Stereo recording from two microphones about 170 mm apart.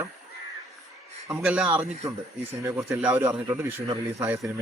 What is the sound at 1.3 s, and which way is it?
Speech, 10° right (ahead or behind).